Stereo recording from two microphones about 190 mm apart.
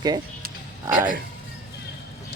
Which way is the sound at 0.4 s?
45° right (ahead or behind).